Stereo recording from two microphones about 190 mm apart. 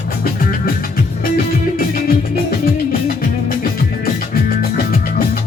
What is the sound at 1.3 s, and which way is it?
Music, 50° left (ahead or behind).